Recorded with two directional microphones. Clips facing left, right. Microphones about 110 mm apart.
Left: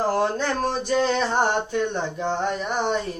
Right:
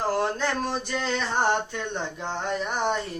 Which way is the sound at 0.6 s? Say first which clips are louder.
Left 6 dB; 35° left (ahead or behind).